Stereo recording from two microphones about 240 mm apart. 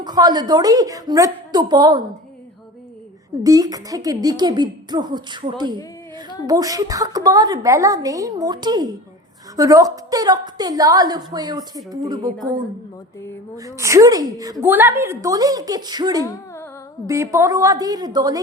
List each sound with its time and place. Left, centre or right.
0.0 s a woman's voice: centre
3.4 s a woman's voice: centre
13.6 s a woman's voice: centre
16.2 s a sound: centre
17.1 s a woman's voice: centre